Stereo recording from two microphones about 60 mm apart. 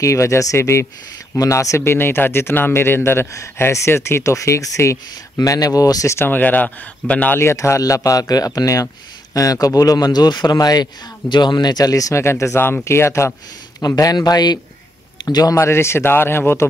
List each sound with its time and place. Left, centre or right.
0.0 s speech: left
1.4 s speech: left
1.9 s speech: left
5.4 s speech: left
6.0 s speech: left
6.3 s speech: left
7.3 s speech: left
7.8 s speech: left
11.8 s speech: left
12.2 s speech: left
12.5 s speech: left
13.7 s speech: left
15.6 s speech: left